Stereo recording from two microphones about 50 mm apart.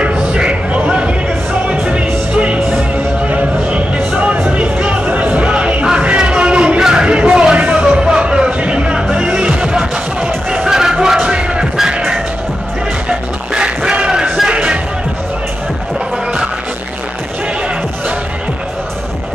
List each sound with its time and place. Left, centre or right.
0.0 s a sound: right
3.3 s music: right
13.6 s music: centre